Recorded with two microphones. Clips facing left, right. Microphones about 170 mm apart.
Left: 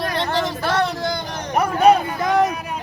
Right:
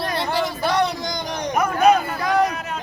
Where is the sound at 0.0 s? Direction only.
10° right (ahead or behind).